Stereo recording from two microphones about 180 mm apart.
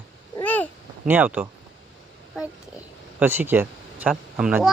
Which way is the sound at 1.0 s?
10° right (ahead or behind).